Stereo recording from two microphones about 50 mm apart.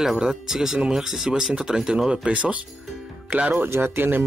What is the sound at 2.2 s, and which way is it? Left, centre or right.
Music, right.